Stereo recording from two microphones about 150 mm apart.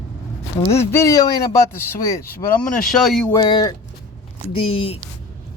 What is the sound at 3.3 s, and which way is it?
Speech, 30° left (ahead or behind).